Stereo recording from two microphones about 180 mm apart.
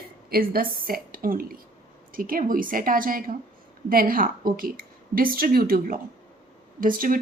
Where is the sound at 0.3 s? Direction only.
55° right (ahead or behind).